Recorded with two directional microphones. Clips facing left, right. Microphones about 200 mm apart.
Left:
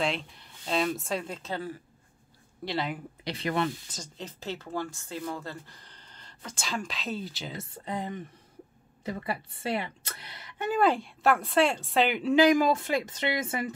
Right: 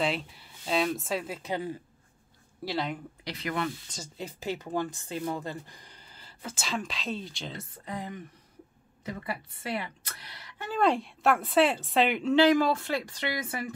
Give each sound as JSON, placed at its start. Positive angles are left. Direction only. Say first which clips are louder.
{"t": 0.0, "sound": "speech", "louder": "right 1 dB", "side_deg": -5}
{"t": 2.6, "sound": "speech", "louder": "even", "side_deg": 0}
{"t": 3.3, "sound": "a woman's voice", "louder": "left 3 dB", "side_deg": 30}
{"t": 3.9, "sound": "speech", "louder": "right 2 dB", "side_deg": -10}
{"t": 7.5, "sound": "a woman's voice", "louder": "left 5 dB", "side_deg": 25}
{"t": 10.8, "sound": "speech", "louder": "even", "side_deg": 0}
{"t": 12.4, "sound": "a woman's voice", "louder": "left 1 dB", "side_deg": 15}